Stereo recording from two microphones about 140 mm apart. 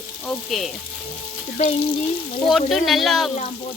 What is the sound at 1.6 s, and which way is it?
Frying, 55° left (ahead or behind).